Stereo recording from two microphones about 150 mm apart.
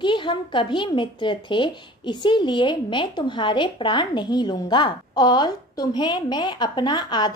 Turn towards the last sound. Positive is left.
turn(degrees=30)  # may be behind; listen again after turning